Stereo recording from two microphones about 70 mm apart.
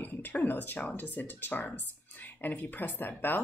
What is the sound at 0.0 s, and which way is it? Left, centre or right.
Speech, left.